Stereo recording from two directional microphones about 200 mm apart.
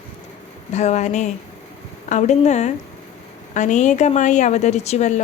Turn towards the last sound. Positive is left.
turn(degrees=35)  # may be behind; listen again after turning